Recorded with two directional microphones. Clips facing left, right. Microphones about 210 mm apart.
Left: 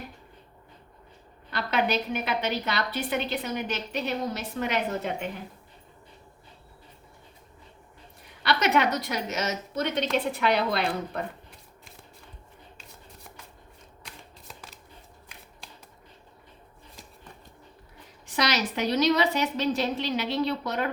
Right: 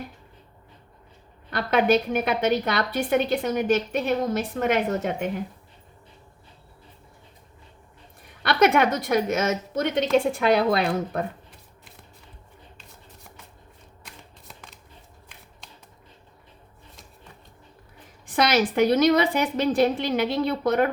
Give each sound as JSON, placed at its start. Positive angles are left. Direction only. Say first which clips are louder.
{"t": 1.5, "sound": "a woman's voice", "louder": "right 6 dB", "side_deg": -50}
{"t": 8.4, "sound": "a woman's voice", "louder": "right 5 dB", "side_deg": -50}
{"t": 14.0, "sound": "shuffling cards", "louder": "even", "side_deg": 0}
{"t": 18.3, "sound": "a woman's voice", "louder": "right 6 dB", "side_deg": -55}